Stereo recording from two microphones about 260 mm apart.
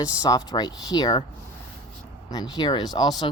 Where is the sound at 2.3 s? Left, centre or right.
Centre.